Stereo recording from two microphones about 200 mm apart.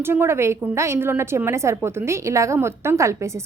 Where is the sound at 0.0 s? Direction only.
10° right (ahead or behind).